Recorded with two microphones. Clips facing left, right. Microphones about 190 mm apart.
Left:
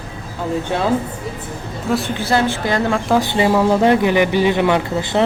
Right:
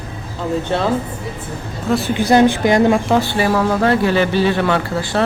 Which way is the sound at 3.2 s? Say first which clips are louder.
Left 1 dB; 20° left (ahead or behind).